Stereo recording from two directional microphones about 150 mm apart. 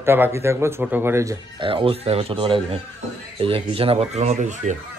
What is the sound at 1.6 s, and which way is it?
Speech, 35° right (ahead or behind).